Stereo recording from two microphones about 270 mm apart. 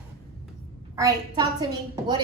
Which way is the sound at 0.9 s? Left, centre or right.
Centre.